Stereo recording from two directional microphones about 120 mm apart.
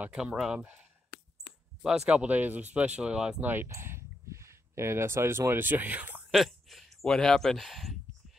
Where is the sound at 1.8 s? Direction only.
10° right (ahead or behind).